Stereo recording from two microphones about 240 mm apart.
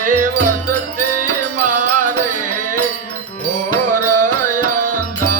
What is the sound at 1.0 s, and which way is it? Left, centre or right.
Music, right.